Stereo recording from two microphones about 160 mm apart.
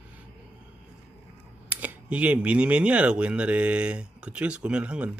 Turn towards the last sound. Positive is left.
turn(degrees=-5)  # may be behind; listen again after turning